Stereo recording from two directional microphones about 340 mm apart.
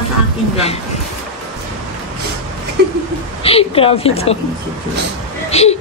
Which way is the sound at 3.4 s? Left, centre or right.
Centre.